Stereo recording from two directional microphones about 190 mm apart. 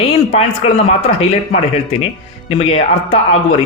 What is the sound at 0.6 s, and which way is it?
Speech, 30° left (ahead or behind).